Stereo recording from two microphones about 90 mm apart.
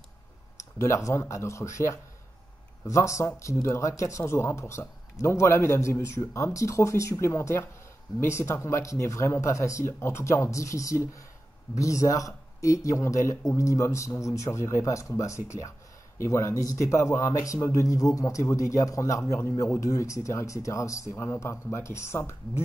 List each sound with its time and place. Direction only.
0.7 s speech: 35° left (ahead or behind)